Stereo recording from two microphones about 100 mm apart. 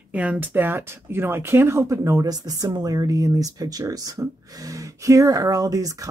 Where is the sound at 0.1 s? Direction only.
15° right (ahead or behind).